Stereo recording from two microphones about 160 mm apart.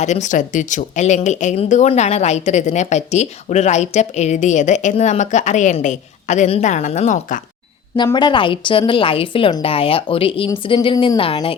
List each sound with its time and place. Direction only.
0.0 s speech: 45° left (ahead or behind)
7.9 s a woman's voice: 30° left (ahead or behind)